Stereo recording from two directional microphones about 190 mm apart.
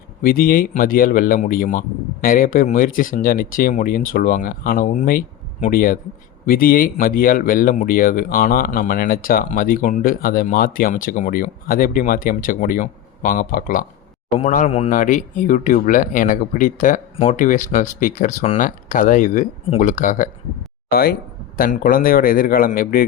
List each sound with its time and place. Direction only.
0.2 s speech: 50° left (ahead or behind)
14.3 s speech: 35° left (ahead or behind)
20.9 s speech: 55° left (ahead or behind)